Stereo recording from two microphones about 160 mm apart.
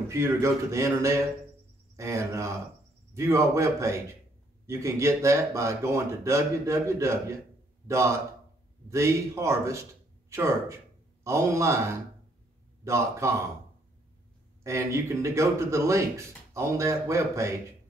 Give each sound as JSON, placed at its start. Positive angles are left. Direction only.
{"t": 0.1, "sound": "a man's voice", "side_deg": -20}
{"t": 14.6, "sound": "speech", "side_deg": -20}